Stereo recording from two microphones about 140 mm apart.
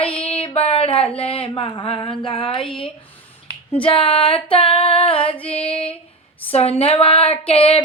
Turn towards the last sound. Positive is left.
turn(degrees=45)  # may be behind; listen again after turning